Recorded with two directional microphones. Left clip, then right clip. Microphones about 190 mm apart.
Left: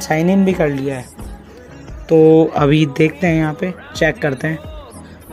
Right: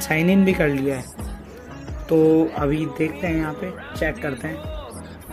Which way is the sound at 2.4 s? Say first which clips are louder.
Left 8 dB; 50° left (ahead or behind).